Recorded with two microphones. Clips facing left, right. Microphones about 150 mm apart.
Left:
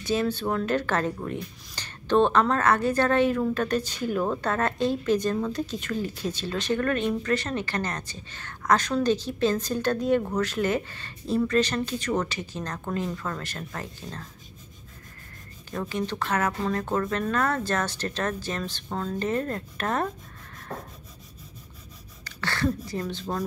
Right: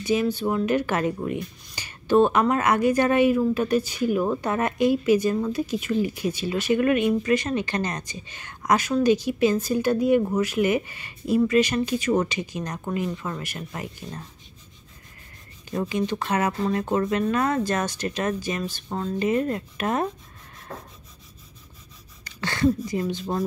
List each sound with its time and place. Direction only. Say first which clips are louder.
0.0 s a woman's voice: right 3 dB; 10° right (ahead or behind)
15.7 s a woman's voice: right 4 dB; 15° right (ahead or behind)
22.2 s speech: right 5 dB; 15° right (ahead or behind)